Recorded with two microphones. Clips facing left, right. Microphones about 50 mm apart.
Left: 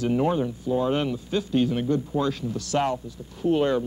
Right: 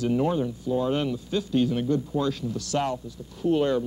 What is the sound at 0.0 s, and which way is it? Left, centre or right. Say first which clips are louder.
Speech: left 1 dB; left.